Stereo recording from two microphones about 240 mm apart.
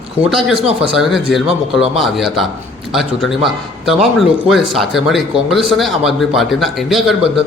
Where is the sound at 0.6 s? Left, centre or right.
Right.